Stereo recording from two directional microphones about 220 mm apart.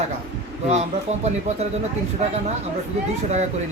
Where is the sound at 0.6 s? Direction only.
30° right (ahead or behind).